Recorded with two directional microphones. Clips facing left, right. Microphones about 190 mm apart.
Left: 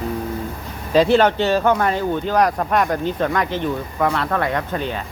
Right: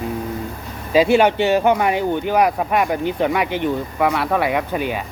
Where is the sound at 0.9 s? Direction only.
10° right (ahead or behind).